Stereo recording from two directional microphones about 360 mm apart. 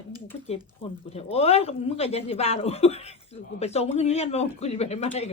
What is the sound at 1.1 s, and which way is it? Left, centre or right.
Speech, centre.